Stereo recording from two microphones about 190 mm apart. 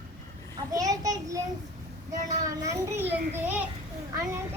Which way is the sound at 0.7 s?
20° right (ahead or behind).